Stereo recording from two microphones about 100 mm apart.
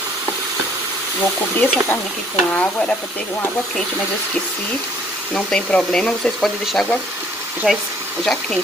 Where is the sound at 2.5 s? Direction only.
15° left (ahead or behind).